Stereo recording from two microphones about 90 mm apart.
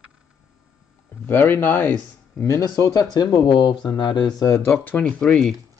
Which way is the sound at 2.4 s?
35° left (ahead or behind).